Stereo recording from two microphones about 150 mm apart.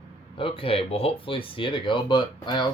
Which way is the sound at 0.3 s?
35° left (ahead or behind).